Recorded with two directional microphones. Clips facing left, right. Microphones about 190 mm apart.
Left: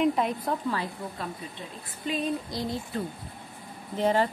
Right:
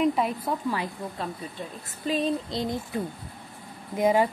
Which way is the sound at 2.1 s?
35° right (ahead or behind).